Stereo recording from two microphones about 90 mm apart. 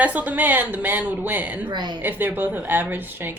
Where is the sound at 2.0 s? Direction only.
20° right (ahead or behind).